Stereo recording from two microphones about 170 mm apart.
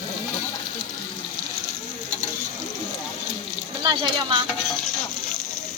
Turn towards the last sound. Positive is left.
turn(degrees=-25)  # may be behind; listen again after turning